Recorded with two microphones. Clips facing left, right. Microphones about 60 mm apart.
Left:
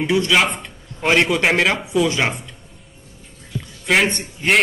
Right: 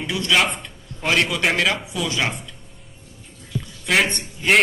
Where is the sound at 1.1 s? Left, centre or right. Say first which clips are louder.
Left 4 dB; centre.